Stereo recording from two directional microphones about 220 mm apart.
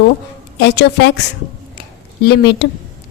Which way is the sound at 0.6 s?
50° left (ahead or behind).